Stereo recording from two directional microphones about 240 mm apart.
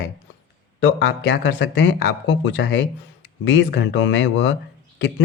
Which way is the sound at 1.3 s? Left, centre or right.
Left.